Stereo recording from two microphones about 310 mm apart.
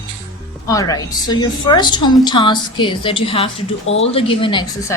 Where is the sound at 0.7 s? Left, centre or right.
Centre.